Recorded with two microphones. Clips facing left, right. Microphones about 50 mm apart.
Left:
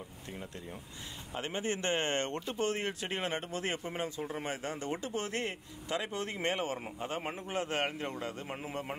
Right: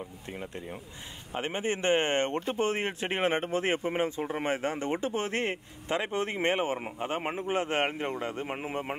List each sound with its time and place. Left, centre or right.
0.3 s speech: right